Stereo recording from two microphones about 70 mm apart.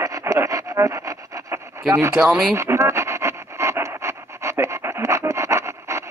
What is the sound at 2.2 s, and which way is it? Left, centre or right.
Speech, centre.